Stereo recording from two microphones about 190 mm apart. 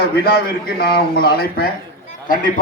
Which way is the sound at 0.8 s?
55° left (ahead or behind).